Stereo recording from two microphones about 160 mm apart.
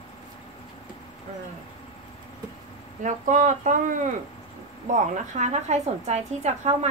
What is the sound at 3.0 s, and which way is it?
A woman's voice, 50° right (ahead or behind).